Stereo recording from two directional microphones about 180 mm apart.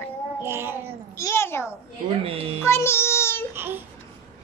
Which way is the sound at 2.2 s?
30° right (ahead or behind).